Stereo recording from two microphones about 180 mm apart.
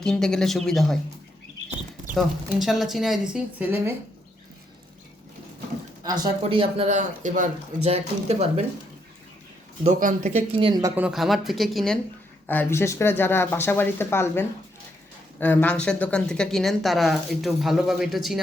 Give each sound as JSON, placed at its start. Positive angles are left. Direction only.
{"t": 0.0, "sound": "speech", "side_deg": 5}
{"t": 2.1, "sound": "speech", "side_deg": 0}
{"t": 6.0, "sound": "speech", "side_deg": -20}
{"t": 9.8, "sound": "speech", "side_deg": -45}
{"t": 10.9, "sound": "speech", "side_deg": -5}
{"t": 12.5, "sound": "speech", "side_deg": 10}